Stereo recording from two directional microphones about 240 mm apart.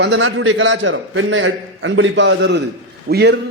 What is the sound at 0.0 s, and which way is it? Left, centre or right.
A man's voice, right.